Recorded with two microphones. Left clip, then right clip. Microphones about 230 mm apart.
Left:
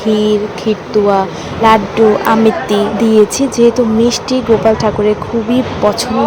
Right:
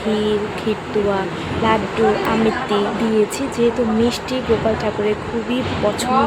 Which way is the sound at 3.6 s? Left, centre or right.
Left.